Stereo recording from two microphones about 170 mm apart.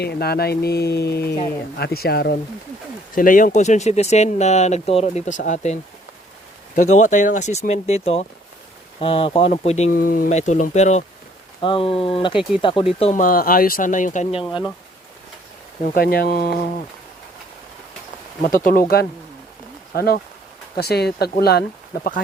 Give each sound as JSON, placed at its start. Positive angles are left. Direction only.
{"t": 0.0, "sound": "speech", "side_deg": 70}
{"t": 3.2, "sound": "speech", "side_deg": 50}
{"t": 9.9, "sound": "speech", "side_deg": 55}
{"t": 11.6, "sound": "speech", "side_deg": 30}
{"t": 13.1, "sound": "speech", "side_deg": 55}
{"t": 16.0, "sound": "speech", "side_deg": 60}
{"t": 18.4, "sound": "speech", "side_deg": 55}